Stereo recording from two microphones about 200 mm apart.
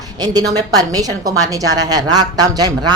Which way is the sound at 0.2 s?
20° right (ahead or behind).